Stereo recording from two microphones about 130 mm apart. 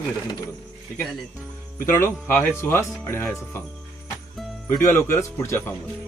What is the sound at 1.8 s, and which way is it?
Speech, 20° left (ahead or behind).